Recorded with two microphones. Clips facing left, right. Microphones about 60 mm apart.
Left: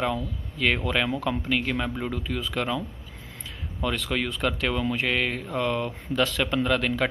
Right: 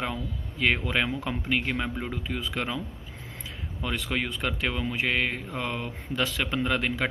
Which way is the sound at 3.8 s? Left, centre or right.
Centre.